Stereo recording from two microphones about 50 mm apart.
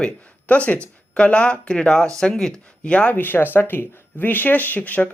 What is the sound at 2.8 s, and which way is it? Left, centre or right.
Speech, left.